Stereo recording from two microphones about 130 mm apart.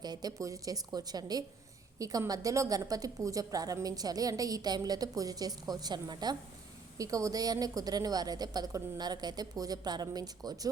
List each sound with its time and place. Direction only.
0.0 s a woman's voice: 30° right (ahead or behind)